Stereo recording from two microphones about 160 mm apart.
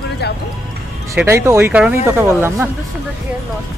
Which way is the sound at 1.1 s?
15° right (ahead or behind).